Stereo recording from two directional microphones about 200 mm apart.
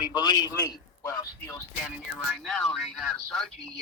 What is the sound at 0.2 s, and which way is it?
A man's voice, 20° left (ahead or behind).